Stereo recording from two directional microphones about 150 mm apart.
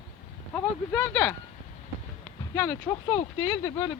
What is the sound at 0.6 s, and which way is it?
Speech, 15° left (ahead or behind).